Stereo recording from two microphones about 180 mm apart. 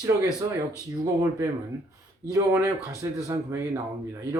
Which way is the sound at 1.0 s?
20° right (ahead or behind).